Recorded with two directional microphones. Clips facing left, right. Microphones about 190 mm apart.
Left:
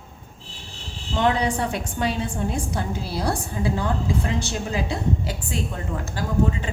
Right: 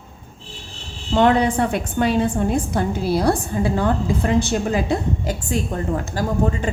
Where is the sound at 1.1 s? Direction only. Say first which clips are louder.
Right 6 dB; 55° right (ahead or behind).